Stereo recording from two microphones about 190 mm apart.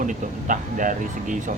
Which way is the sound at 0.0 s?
45° right (ahead or behind).